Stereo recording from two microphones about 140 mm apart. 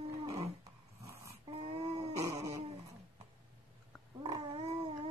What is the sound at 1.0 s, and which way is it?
Dog, 20° right (ahead or behind).